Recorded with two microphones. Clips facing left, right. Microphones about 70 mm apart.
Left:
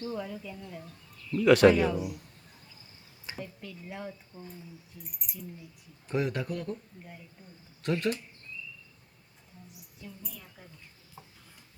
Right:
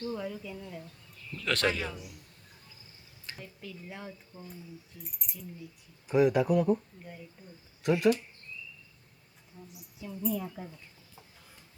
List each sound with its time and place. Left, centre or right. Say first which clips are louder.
0.0 s speech: even; centre
1.4 s a man's voice: left 11 dB; centre
3.4 s speech: right 1 dB; centre
10.0 s speech: right 5 dB; centre
10.3 s speech: right 14 dB; centre